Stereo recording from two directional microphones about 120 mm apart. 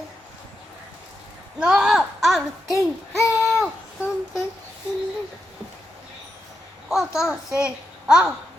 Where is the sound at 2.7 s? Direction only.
25° left (ahead or behind).